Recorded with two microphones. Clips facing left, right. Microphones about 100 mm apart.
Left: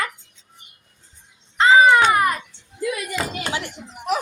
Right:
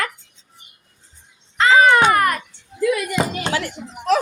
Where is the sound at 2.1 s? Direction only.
70° right (ahead or behind).